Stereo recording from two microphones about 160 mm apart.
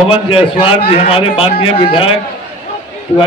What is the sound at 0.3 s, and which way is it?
A man's voice, 35° left (ahead or behind).